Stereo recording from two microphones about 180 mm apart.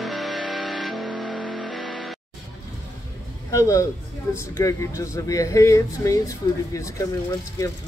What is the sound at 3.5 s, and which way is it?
Speech, 15° left (ahead or behind).